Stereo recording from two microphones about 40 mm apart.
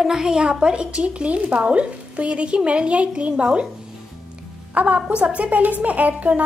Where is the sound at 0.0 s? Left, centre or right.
Centre.